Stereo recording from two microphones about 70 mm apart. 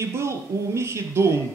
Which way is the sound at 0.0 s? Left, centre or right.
Right.